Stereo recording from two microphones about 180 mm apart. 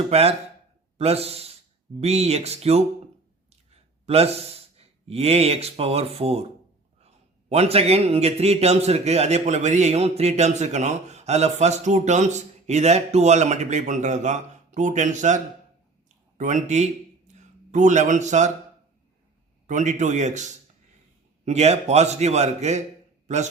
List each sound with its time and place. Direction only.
0.1 s a man's voice: 35° right (ahead or behind)
7.5 s a man's voice: 35° right (ahead or behind)
16.4 s a man's voice: 45° right (ahead or behind)
19.6 s a man's voice: 40° right (ahead or behind)